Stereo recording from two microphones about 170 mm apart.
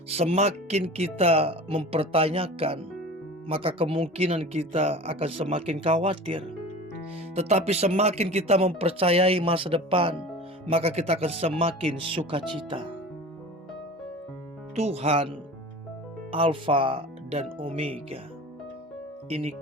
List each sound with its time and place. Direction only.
0.1 s speech: 40° right (ahead or behind)
14.8 s speech: 35° right (ahead or behind)
19.3 s speech: 35° right (ahead or behind)